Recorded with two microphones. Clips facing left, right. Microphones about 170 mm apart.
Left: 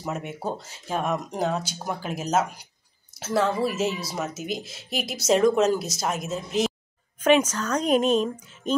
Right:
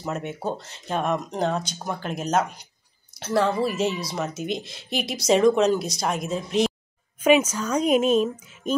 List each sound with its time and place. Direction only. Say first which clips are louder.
0.0 s a woman's voice: right 2 dB; 5° left (ahead or behind)
7.2 s a woman's voice: right 1 dB; 10° right (ahead or behind)